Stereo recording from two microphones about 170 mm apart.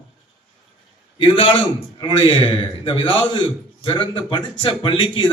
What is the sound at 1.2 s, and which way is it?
A man's voice, 30° left (ahead or behind).